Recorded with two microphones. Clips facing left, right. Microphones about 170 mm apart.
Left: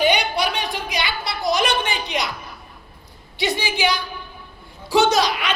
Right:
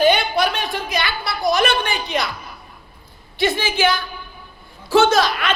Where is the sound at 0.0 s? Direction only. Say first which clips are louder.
Right 3 dB; 15° left (ahead or behind).